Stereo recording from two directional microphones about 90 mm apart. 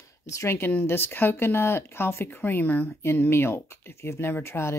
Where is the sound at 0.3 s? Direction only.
30° left (ahead or behind).